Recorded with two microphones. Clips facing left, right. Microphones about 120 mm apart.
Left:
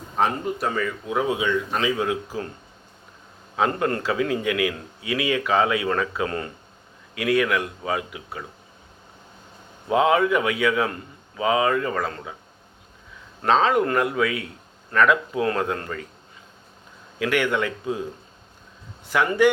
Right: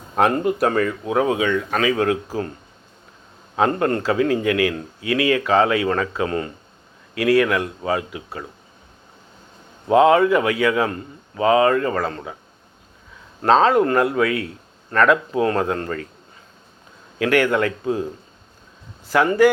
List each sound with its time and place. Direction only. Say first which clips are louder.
0.2 s speech: right 6 dB; 65° right (ahead or behind)
3.5 s speech: right 4 dB; 35° right (ahead or behind)
4.6 s speech: right 4 dB; 50° right (ahead or behind)
5.4 s speech: right 4 dB; 35° right (ahead or behind)
9.9 s speech: right 5 dB; 35° right (ahead or behind)
13.4 s speech: right 4 dB; 35° right (ahead or behind)
17.2 s speech: right 5 dB; 40° right (ahead or behind)
19.0 s speech: right 4 dB; 35° right (ahead or behind)